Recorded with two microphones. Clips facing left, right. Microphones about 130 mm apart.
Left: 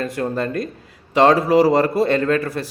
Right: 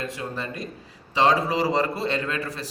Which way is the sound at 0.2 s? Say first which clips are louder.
Left 10 dB; 55° left (ahead or behind).